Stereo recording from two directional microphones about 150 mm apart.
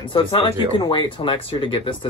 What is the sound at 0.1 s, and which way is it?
Speech, 35° left (ahead or behind).